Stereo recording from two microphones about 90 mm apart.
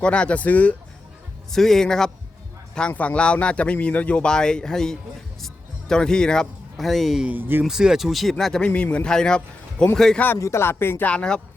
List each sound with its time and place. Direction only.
0.0 s speech: 10° left (ahead or behind)
1.5 s speech: 5° left (ahead or behind)
7.3 s speech: 25° right (ahead or behind)
7.6 s speech: 5° right (ahead or behind)
8.6 s speech: 15° left (ahead or behind)
10.3 s speech: 30° left (ahead or behind)
11.1 s speech: 10° left (ahead or behind)